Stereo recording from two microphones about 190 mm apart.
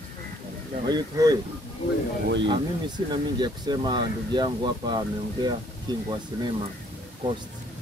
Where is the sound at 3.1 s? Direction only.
25° right (ahead or behind).